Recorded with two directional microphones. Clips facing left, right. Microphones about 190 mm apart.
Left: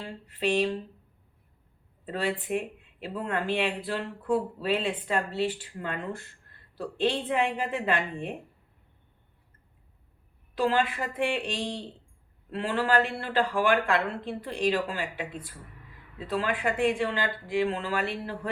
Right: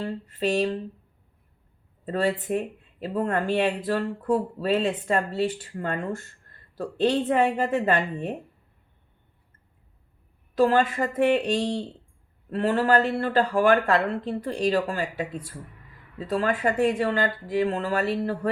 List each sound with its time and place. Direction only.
0.0 s speech: 45° right (ahead or behind)
2.0 s speech: 40° right (ahead or behind)
10.5 s speech: 45° right (ahead or behind)